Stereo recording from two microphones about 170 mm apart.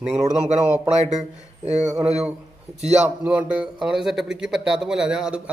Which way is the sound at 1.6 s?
45° right (ahead or behind).